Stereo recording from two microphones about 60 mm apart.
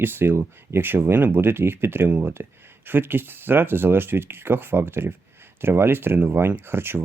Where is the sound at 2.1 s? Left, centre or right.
Right.